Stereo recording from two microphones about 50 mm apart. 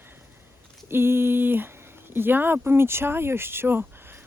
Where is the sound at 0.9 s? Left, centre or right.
Right.